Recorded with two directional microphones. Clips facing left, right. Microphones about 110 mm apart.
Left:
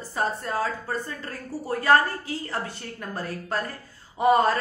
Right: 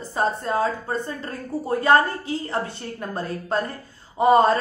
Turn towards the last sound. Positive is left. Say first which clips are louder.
# right 4 dB
turn(degrees=-25)  # may be behind; listen again after turning